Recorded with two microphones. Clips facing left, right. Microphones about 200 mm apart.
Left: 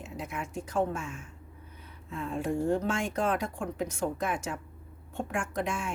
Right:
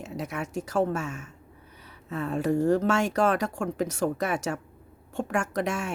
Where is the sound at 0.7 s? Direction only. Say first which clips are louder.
Right 4 dB; 75° right (ahead or behind).